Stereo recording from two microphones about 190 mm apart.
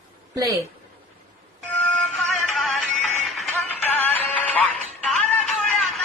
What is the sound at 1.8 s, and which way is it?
Music, 5° left (ahead or behind).